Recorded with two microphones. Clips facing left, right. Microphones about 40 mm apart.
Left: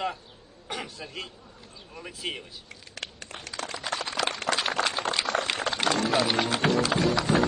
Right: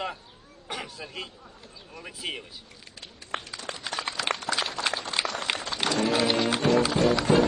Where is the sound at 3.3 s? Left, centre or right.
Right.